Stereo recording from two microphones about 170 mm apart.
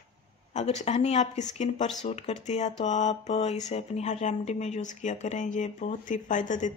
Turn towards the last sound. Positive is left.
turn(degrees=45)  # may be behind; listen again after turning